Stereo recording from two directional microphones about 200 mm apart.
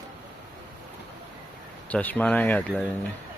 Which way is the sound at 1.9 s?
10° left (ahead or behind).